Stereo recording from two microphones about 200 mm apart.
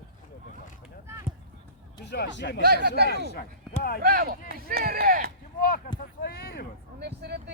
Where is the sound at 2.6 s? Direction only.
50° right (ahead or behind).